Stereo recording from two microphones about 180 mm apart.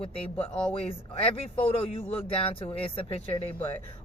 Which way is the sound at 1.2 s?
30° left (ahead or behind).